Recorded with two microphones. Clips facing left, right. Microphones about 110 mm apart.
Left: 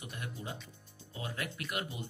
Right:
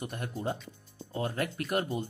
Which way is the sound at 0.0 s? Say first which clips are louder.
Right 8 dB; 45° right (ahead or behind).